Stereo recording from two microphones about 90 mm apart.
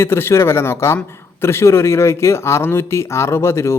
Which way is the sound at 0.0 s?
25° left (ahead or behind).